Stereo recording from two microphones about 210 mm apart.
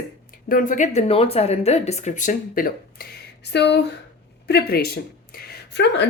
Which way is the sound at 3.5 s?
55° left (ahead or behind).